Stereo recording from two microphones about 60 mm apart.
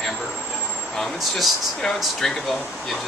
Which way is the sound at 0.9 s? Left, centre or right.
Centre.